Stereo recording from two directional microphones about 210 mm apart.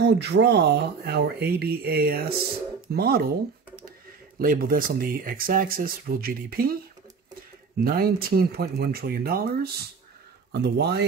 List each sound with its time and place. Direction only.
0.0 s speech: 55° right (ahead or behind)
4.4 s speech: 45° right (ahead or behind)
7.8 s speech: 45° right (ahead or behind)